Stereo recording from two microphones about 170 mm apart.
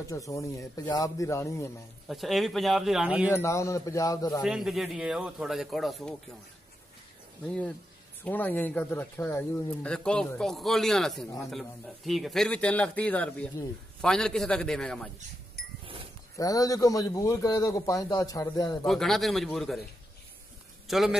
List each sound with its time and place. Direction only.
0.0 s a man's voice: 20° left (ahead or behind)
2.0 s speech: centre (ahead or behind)
3.3 s speech: 15° left (ahead or behind)
4.4 s speech: centre (ahead or behind)
7.4 s speech: 5° left (ahead or behind)
16.3 s a man's voice: 20° left (ahead or behind)
18.9 s speech: centre (ahead or behind)
20.8 s a man's voice: centre (ahead or behind)